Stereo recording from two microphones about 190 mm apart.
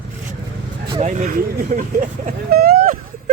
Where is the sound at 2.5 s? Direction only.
55° right (ahead or behind).